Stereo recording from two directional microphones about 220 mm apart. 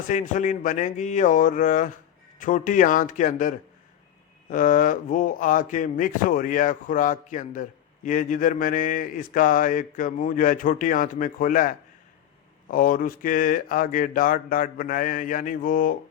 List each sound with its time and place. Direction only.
0.1 s speech: 35° left (ahead or behind)